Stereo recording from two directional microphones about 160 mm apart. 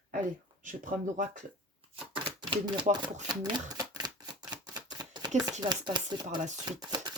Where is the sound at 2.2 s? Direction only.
30° right (ahead or behind).